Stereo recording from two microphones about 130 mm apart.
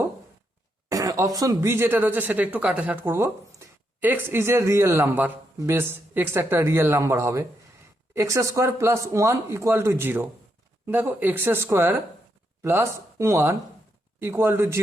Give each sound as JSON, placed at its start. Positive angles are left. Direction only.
{"t": 0.9, "sound": "a woman's voice", "side_deg": -25}